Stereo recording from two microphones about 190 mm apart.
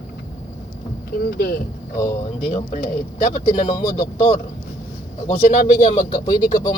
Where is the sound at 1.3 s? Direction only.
55° left (ahead or behind).